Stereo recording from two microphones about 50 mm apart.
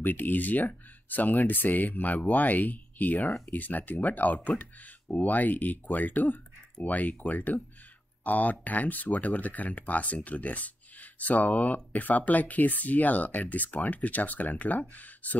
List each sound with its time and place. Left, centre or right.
0.0 s speech: left